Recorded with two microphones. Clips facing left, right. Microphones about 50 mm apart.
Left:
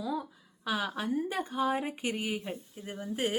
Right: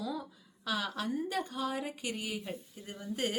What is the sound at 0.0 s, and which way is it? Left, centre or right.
A woman's voice, centre.